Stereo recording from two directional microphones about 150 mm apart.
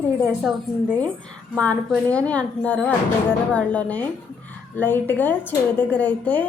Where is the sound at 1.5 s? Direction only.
10° left (ahead or behind).